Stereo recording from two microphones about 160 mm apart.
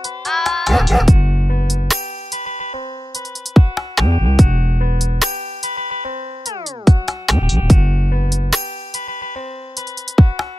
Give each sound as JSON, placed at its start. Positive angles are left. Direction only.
{"t": 0.3, "sound": "music", "side_deg": 0}
{"t": 1.2, "sound": "music", "side_deg": 55}
{"t": 1.9, "sound": "music", "side_deg": 0}
{"t": 3.5, "sound": "music", "side_deg": 0}
{"t": 4.5, "sound": "music", "side_deg": -60}
{"t": 4.9, "sound": "music", "side_deg": 0}
{"t": 5.3, "sound": "music", "side_deg": -45}
{"t": 6.8, "sound": "music", "side_deg": 0}
{"t": 7.8, "sound": "music", "side_deg": 60}
{"t": 8.5, "sound": "music", "side_deg": 0}
{"t": 10.2, "sound": "music", "side_deg": 0}